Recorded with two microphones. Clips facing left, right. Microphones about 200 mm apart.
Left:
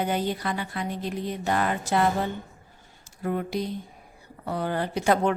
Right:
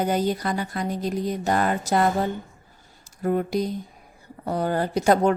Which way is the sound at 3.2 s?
45° right (ahead or behind).